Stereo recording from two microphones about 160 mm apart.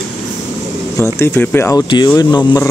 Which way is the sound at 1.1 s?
15° left (ahead or behind).